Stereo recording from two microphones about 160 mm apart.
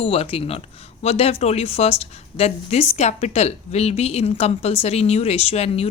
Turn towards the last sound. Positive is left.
turn(degrees=40)  # may be behind; listen again after turning